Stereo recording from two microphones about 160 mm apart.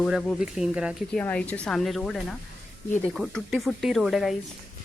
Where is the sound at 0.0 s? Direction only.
Centre (ahead or behind).